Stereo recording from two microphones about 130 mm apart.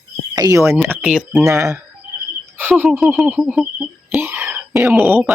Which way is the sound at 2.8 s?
10° right (ahead or behind).